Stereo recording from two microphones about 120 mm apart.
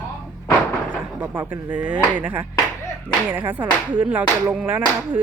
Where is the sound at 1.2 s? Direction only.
15° right (ahead or behind).